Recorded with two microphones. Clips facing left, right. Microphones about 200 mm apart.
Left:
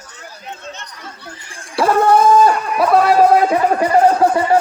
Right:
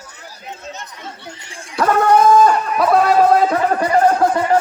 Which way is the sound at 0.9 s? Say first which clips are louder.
Right 1 dB; 25° right (ahead or behind).